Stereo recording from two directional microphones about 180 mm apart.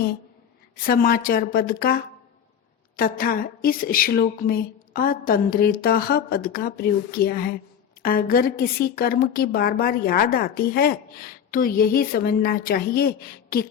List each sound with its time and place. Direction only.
0.9 s speech: 55° left (ahead or behind)